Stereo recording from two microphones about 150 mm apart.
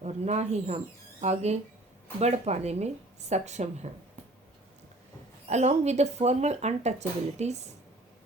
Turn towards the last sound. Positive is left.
turn(degrees=-50)  # may be behind; listen again after turning